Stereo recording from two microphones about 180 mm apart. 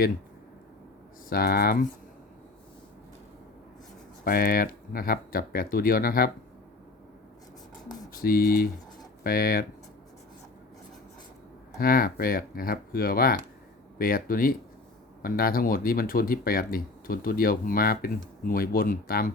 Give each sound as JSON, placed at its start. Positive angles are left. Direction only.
{"t": 1.3, "sound": "speech", "side_deg": 55}
{"t": 4.2, "sound": "speech", "side_deg": 55}
{"t": 8.2, "sound": "speech", "side_deg": 55}
{"t": 11.8, "sound": "speech", "side_deg": 55}